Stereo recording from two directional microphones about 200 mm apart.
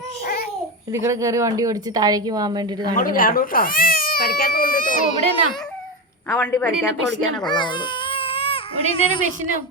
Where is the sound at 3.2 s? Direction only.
45° left (ahead or behind).